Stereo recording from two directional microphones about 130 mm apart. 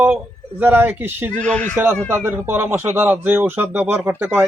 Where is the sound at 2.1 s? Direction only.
15° right (ahead or behind).